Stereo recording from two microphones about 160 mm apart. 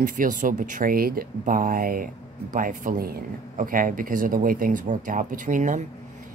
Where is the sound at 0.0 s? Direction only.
55° right (ahead or behind).